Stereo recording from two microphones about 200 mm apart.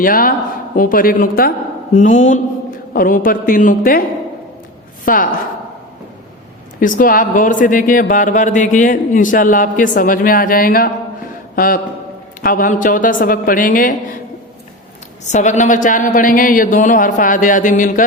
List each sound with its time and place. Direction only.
0.0 s a man's voice: 45° left (ahead or behind)
5.0 s a man's voice: 45° left (ahead or behind)
6.7 s a man's voice: 40° left (ahead or behind)
15.2 s speech: 35° left (ahead or behind)